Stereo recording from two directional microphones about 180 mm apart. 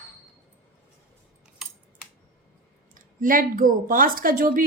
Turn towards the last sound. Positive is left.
turn(degrees=-50)  # may be behind; listen again after turning